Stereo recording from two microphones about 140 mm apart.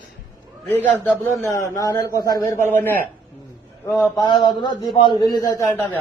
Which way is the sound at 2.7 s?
15° left (ahead or behind).